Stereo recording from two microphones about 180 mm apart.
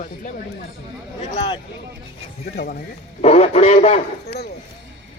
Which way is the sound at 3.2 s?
35° left (ahead or behind).